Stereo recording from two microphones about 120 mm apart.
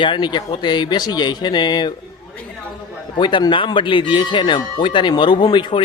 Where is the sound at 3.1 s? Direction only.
40° left (ahead or behind).